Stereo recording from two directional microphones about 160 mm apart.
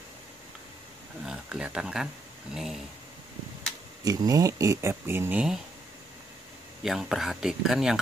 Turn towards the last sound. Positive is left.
turn(degrees=-5)  # may be behind; listen again after turning